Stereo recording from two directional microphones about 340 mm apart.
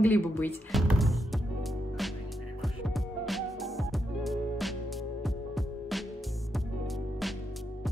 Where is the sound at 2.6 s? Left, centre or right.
Centre.